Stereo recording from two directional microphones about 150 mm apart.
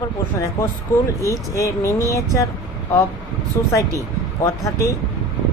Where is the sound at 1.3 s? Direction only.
20° left (ahead or behind).